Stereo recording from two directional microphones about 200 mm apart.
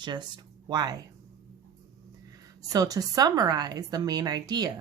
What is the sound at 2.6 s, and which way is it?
A woman's voice, 15° right (ahead or behind).